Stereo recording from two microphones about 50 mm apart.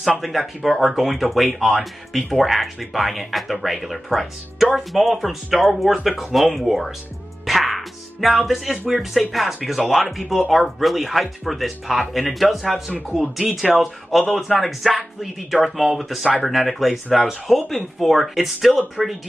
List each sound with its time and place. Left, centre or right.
0.2 s speech: centre
7.4 s music: centre
8.9 s speech: centre